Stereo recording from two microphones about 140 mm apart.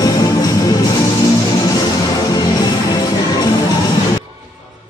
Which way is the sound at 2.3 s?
30° left (ahead or behind).